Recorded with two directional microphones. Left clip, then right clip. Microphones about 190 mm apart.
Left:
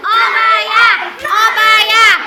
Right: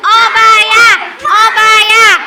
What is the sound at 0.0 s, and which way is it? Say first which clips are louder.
Crowd: right 5 dB; 35° right (ahead or behind).